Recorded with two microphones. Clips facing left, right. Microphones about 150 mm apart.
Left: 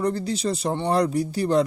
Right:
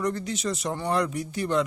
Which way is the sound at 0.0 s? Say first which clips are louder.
Left 4 dB; 35° left (ahead or behind).